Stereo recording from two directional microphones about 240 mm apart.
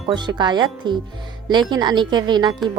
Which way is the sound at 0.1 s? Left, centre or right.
Centre.